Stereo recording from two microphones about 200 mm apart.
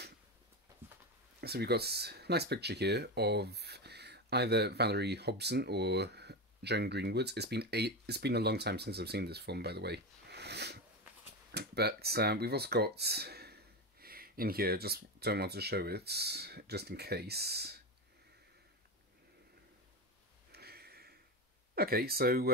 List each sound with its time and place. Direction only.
1.4 s speech: 55° right (ahead or behind)
20.5 s a sound: 50° right (ahead or behind)
21.7 s speech: 50° right (ahead or behind)